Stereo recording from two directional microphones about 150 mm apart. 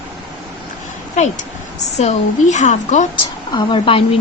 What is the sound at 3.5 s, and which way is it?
Speech, 35° left (ahead or behind).